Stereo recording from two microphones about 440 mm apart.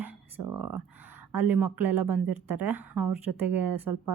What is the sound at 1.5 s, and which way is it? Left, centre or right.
Speech, centre.